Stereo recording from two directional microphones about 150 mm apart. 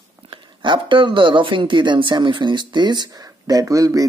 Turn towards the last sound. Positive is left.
turn(degrees=-20)  # may be behind; listen again after turning